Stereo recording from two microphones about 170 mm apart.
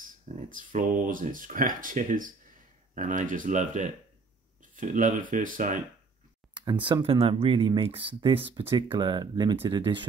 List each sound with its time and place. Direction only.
0.0 s speech: 50° right (ahead or behind)
6.6 s speech: 25° right (ahead or behind)